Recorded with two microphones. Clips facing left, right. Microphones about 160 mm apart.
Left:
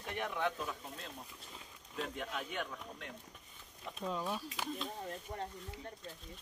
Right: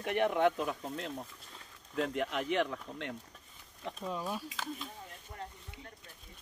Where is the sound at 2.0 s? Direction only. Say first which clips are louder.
Right 7 dB; 90° right.